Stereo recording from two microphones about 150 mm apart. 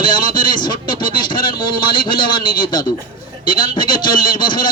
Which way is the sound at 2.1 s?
75° left (ahead or behind).